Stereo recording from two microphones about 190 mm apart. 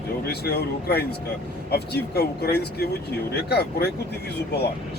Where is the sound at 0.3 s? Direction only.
60° left (ahead or behind).